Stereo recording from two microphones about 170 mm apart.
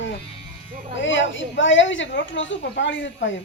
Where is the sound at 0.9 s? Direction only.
90° left.